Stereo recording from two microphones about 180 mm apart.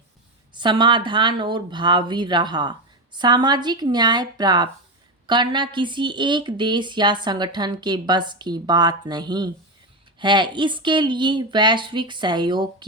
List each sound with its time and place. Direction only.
0.5 s a woman's voice: 25° right (ahead or behind)